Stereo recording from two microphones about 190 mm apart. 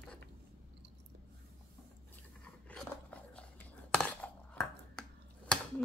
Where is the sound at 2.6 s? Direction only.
5° left (ahead or behind).